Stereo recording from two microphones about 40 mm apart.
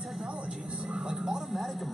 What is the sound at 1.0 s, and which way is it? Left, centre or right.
Speech, centre.